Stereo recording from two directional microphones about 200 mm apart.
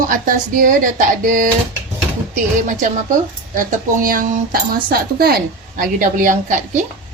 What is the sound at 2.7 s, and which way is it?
Speech, 40° right (ahead or behind).